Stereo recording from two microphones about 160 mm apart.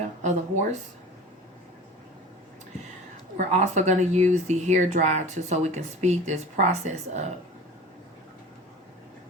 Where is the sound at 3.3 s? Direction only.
45° right (ahead or behind).